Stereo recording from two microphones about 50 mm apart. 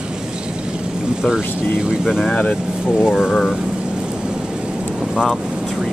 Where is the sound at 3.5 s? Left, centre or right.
Centre.